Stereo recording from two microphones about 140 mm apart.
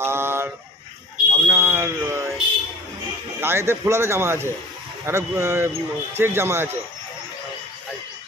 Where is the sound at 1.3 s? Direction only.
20° right (ahead or behind).